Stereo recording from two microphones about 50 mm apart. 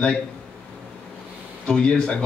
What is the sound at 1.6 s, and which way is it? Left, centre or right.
Speech, centre.